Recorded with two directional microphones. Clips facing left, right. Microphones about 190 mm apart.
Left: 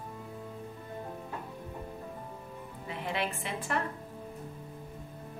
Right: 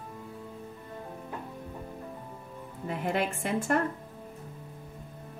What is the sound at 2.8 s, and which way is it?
A woman's voice, 45° right (ahead or behind).